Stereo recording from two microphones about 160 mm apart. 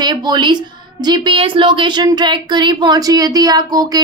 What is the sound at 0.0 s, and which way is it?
A woman's voice, 25° right (ahead or behind).